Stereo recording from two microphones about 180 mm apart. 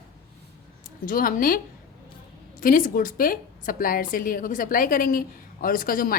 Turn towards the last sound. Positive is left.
turn(degrees=50)  # may be behind; listen again after turning